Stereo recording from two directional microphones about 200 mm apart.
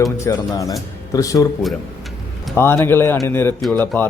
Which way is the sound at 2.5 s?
10° left (ahead or behind).